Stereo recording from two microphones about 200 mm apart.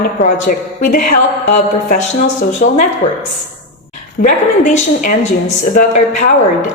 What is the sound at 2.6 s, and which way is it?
Speech, 45° left (ahead or behind).